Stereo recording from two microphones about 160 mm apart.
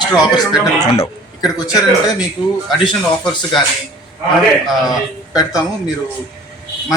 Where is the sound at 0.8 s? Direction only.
40° left (ahead or behind).